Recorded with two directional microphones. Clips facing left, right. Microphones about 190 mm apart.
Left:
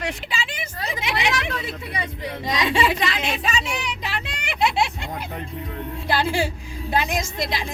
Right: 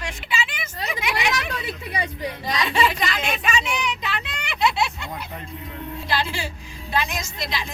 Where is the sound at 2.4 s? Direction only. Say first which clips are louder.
Left 1 dB; 25° left (ahead or behind); by 4.9 s 40° left (ahead or behind).